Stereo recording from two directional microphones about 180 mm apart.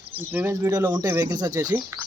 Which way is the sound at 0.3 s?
15° right (ahead or behind).